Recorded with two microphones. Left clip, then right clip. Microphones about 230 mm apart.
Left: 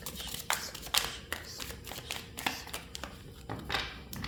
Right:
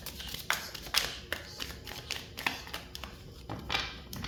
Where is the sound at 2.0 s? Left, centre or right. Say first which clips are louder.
Right 2 dB; centre.